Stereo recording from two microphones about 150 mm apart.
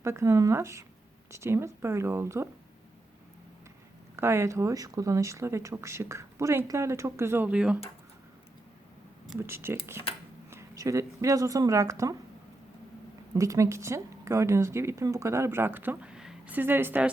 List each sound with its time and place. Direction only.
0.0 s a woman's voice: 20° right (ahead or behind)
4.1 s speech: 15° right (ahead or behind)
9.5 s a woman's voice: 15° right (ahead or behind)
13.3 s a woman's voice: 20° right (ahead or behind)